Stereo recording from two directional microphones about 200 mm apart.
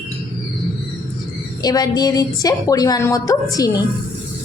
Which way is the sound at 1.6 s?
20° left (ahead or behind).